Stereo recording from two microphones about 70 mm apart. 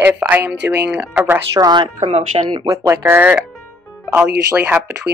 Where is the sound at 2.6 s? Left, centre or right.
Right.